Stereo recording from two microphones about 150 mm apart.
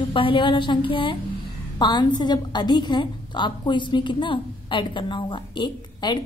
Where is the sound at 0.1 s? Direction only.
35° left (ahead or behind).